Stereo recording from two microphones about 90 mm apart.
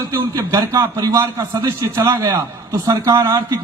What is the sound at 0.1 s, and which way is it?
A man's voice, 35° right (ahead or behind).